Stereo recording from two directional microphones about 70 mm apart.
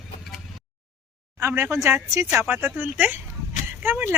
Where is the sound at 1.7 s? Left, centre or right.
Right.